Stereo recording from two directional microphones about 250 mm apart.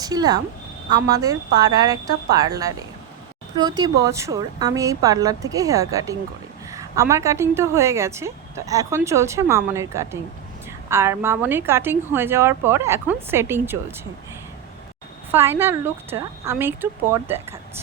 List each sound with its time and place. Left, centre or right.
0.0 s a woman's voice: centre
15.3 s a woman's voice: centre